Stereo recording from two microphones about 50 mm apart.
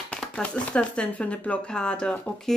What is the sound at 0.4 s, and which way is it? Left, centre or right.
Speech, left.